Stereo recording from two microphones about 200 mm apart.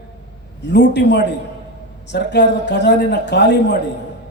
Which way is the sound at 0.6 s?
60° left (ahead or behind).